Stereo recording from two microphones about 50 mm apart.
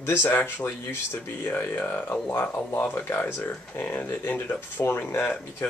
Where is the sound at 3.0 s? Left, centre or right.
Left.